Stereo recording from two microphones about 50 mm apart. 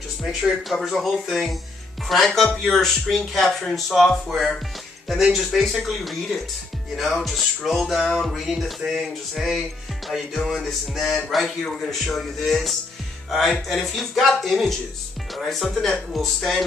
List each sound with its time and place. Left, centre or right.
0.2 s speech: centre
0.7 s music: centre